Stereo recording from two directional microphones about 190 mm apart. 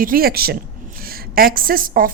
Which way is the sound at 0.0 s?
50° right (ahead or behind).